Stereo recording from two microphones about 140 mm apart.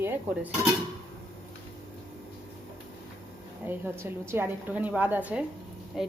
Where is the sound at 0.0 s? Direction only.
15° right (ahead or behind).